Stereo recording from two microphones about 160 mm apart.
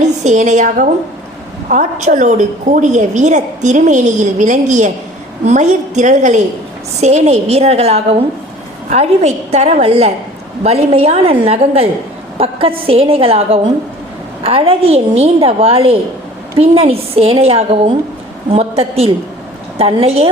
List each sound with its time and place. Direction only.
0.0 s a woman's voice: 45° right (ahead or behind)